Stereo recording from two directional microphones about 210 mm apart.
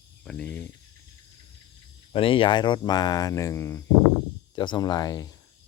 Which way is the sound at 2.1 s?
25° left (ahead or behind).